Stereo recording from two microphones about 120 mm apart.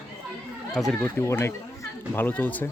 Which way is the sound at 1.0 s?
20° left (ahead or behind).